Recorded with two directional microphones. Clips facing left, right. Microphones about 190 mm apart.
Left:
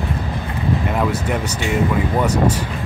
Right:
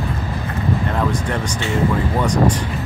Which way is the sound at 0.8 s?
10° left (ahead or behind).